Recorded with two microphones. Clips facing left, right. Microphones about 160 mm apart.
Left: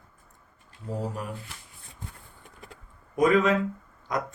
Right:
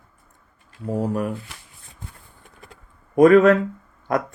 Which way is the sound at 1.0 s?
60° right (ahead or behind).